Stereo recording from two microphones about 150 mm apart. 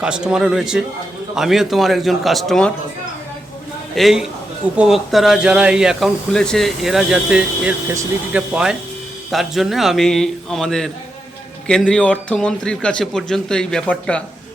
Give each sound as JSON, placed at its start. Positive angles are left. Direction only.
{"t": 0.0, "sound": "speech", "side_deg": -5}
{"t": 3.9, "sound": "speech", "side_deg": 0}